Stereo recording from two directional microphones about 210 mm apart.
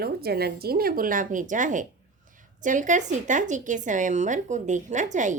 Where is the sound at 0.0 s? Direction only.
50° right (ahead or behind).